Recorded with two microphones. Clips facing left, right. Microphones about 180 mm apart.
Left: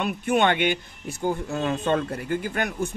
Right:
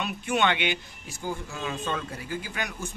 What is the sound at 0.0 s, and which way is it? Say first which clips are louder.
Speech: left 4 dB; 50° left (ahead or behind).